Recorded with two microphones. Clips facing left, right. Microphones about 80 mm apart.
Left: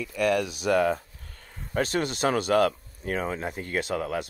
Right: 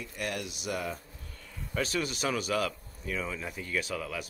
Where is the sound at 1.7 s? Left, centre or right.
Left.